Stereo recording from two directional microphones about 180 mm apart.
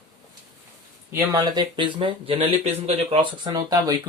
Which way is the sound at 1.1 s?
20° right (ahead or behind).